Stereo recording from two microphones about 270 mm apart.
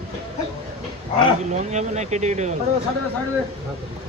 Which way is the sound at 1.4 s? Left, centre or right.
Right.